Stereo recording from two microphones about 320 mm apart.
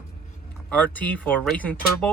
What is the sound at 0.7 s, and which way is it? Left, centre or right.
Speech, centre.